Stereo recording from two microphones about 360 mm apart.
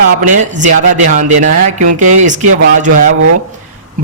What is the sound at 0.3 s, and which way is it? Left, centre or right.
Speech, centre.